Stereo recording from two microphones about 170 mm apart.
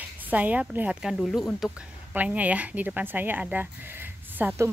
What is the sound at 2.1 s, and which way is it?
Speech, 10° right (ahead or behind).